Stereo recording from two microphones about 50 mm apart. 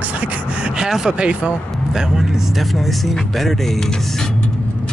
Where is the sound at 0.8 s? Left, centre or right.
Centre.